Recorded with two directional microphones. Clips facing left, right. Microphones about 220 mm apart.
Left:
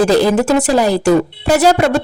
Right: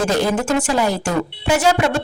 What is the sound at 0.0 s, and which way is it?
Speech, 35° left (ahead or behind).